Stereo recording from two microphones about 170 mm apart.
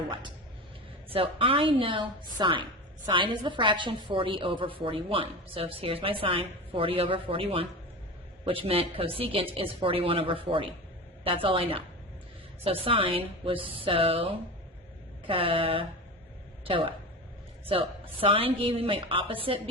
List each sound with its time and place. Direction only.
1.1 s a woman's voice: 30° right (ahead or behind)